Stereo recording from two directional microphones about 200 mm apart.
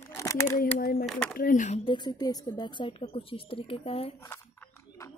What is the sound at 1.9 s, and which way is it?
A woman's voice, 20° left (ahead or behind).